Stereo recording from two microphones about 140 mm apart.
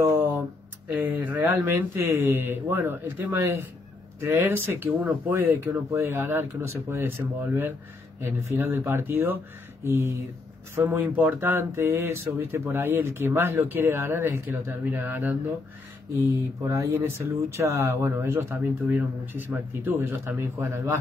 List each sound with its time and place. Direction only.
1.0 s speech: 15° right (ahead or behind)
16.6 s speech: 20° right (ahead or behind)